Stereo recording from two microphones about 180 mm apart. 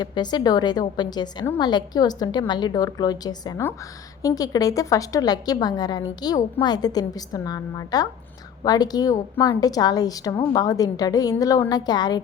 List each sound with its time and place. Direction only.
0.0 s a woman's voice: 25° left (ahead or behind)